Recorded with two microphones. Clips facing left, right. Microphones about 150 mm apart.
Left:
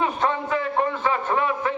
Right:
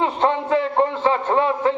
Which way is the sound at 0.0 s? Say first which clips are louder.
Right 4 dB; 25° right (ahead or behind).